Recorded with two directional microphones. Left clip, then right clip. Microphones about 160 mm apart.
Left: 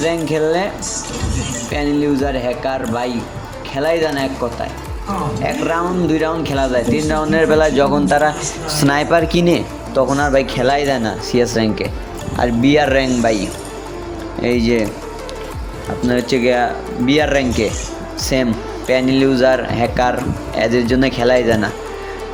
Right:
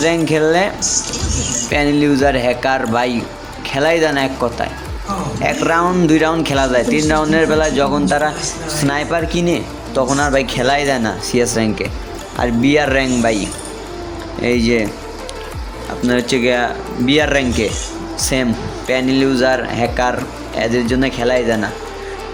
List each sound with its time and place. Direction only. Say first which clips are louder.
0.3 s speech: right 3 dB; 10° right (ahead or behind)
1.7 s speech: right 3 dB; 20° right (ahead or behind); by 8.3 s 10° left (ahead or behind)
8.7 s speech: left 4 dB; 20° left (ahead or behind)
10.0 s speech: left 1 dB; 5° left (ahead or behind)
16.0 s speech: even; 5° left (ahead or behind)